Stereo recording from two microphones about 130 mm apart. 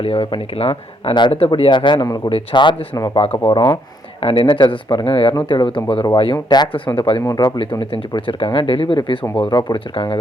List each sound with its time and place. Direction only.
0.0 s speech: 45° left (ahead or behind)
7.2 s speech: 25° left (ahead or behind)